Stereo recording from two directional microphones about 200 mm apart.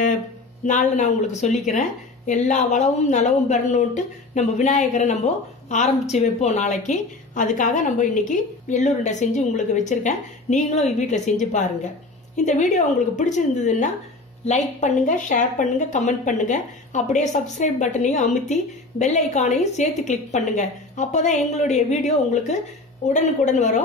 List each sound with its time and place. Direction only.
0.7 s a woman's voice: 35° left (ahead or behind)